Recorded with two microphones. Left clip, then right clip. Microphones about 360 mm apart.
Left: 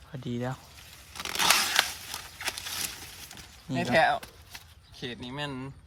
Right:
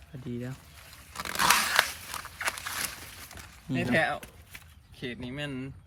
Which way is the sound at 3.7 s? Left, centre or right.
Centre.